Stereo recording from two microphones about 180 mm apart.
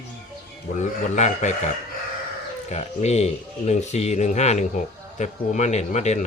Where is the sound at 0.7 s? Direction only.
40° left (ahead or behind).